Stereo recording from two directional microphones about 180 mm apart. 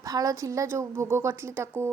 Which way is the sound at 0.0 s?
20° right (ahead or behind).